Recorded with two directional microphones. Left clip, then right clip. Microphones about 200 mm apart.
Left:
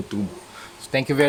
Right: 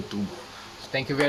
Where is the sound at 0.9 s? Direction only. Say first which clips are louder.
Left 6 dB; 55° left (ahead or behind).